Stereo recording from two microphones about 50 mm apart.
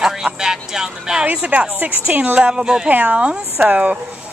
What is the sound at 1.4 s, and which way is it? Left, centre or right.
Speech, right.